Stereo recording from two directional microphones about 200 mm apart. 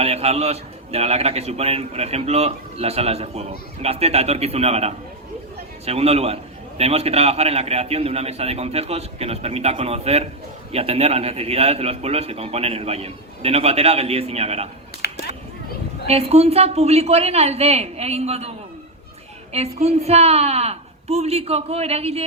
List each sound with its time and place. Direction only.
0.0 s a man's voice: 30° right (ahead or behind)
15.0 s a sound: 55° left (ahead or behind)
16.0 s a man's voice: 30° right (ahead or behind)
19.5 s a man's voice: 30° right (ahead or behind)